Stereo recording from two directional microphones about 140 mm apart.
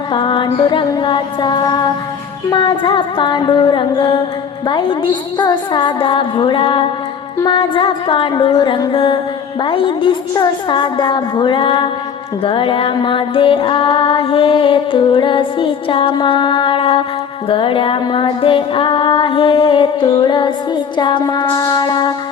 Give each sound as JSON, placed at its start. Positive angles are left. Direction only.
{"t": 0.1, "sound": "music", "side_deg": 35}